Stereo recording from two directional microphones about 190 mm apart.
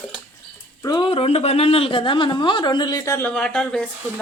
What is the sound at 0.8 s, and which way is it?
Speech, 25° left (ahead or behind).